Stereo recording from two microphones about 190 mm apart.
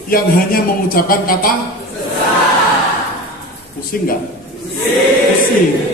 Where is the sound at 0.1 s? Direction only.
50° left (ahead or behind).